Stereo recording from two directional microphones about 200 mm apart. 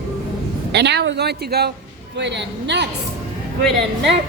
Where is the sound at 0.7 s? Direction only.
60° right (ahead or behind).